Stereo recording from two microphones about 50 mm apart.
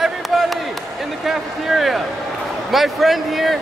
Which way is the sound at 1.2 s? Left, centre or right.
Centre.